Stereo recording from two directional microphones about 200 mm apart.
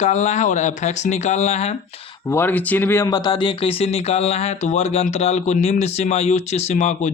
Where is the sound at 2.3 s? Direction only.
10° left (ahead or behind).